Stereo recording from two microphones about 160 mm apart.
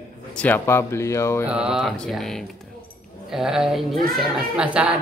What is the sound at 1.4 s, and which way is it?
A man's voice, 5° right (ahead or behind).